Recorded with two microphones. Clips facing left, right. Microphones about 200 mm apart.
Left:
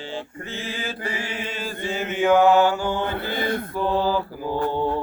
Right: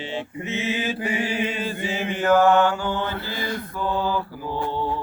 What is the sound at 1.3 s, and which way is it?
Mantra, 5° right (ahead or behind).